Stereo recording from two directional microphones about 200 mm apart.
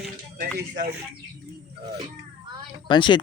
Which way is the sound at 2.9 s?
25° left (ahead or behind).